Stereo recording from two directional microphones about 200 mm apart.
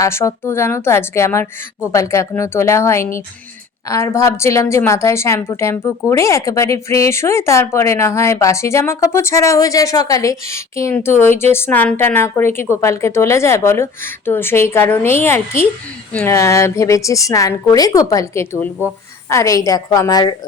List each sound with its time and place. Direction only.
0.0 s speech: 15° left (ahead or behind)